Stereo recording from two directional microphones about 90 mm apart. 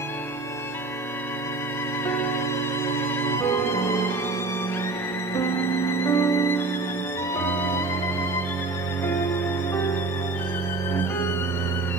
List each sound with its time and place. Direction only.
2.0 s music: 25° left (ahead or behind)
5.3 s music: 25° left (ahead or behind)